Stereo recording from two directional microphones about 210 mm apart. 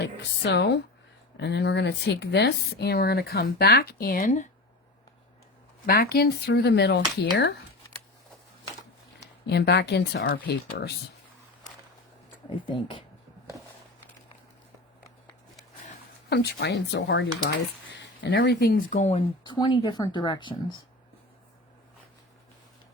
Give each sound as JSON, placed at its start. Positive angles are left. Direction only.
{"t": 0.0, "sound": "a woman's voice", "side_deg": 55}
{"t": 5.8, "sound": "speech", "side_deg": 45}
{"t": 9.5, "sound": "speech", "side_deg": 50}
{"t": 12.5, "sound": "speech", "side_deg": 25}
{"t": 16.3, "sound": "speech", "side_deg": 50}